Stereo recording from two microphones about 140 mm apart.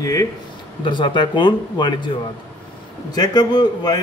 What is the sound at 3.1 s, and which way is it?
Speech, 30° left (ahead or behind).